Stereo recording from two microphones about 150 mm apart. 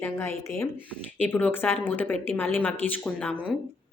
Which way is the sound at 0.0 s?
15° left (ahead or behind).